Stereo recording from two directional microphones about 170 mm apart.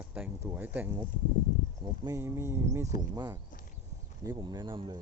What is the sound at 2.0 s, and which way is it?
Speech, 15° right (ahead or behind).